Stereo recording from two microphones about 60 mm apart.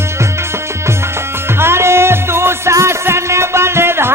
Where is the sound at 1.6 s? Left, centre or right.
Right.